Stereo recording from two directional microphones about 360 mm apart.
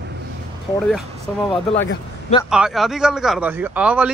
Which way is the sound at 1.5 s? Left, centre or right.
Centre.